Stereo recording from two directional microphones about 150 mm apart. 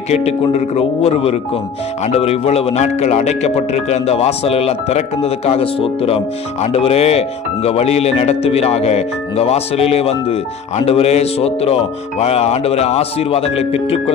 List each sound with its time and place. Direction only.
0.1 s speech: 45° left (ahead or behind)